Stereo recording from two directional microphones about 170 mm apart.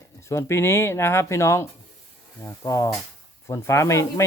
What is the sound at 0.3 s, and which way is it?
Speech, 15° left (ahead or behind).